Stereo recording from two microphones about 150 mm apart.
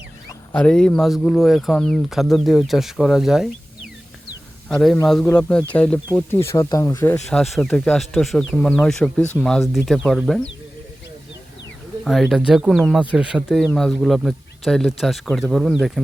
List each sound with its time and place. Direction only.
0.5 s speech: 5° left (ahead or behind)
4.7 s speech: centre (ahead or behind); by 7.2 s 20° left (ahead or behind)
7.3 s speech: centre (ahead or behind)
12.0 s speech: centre (ahead or behind)